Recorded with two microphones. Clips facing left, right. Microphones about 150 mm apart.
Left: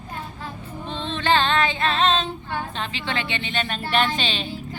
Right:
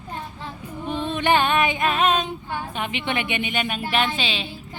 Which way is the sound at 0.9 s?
10° right (ahead or behind).